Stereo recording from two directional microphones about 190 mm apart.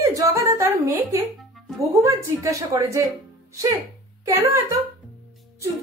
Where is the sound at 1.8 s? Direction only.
15° right (ahead or behind).